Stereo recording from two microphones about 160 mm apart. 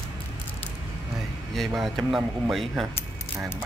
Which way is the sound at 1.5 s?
Centre (ahead or behind).